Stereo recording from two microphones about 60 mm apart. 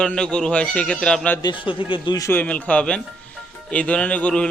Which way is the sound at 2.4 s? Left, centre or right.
Left.